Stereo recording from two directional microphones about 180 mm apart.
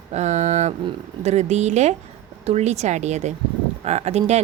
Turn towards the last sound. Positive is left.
turn(degrees=-35)  # may be behind; listen again after turning